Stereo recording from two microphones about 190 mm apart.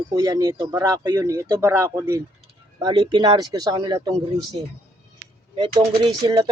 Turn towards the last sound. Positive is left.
turn(degrees=-25)  # may be behind; listen again after turning